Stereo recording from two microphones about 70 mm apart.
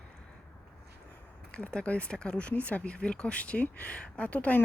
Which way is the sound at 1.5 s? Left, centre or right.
Centre.